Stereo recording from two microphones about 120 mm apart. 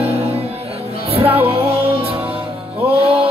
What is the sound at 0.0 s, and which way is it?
Music, 55° right (ahead or behind).